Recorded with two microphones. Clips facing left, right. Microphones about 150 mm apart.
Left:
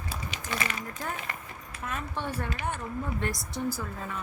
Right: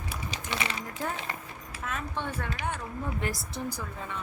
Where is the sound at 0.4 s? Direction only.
20° right (ahead or behind).